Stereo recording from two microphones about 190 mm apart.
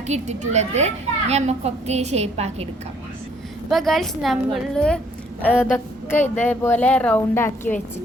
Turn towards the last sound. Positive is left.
turn(degrees=10)  # may be behind; listen again after turning